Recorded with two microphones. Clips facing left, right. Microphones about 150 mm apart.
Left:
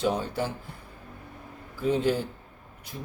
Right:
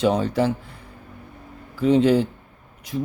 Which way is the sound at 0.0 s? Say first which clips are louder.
Right 8 dB; 90° right.